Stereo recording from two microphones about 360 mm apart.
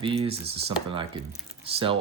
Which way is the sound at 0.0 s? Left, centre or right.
Centre.